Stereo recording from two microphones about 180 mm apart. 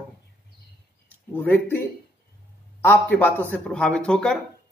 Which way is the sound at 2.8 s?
10° left (ahead or behind).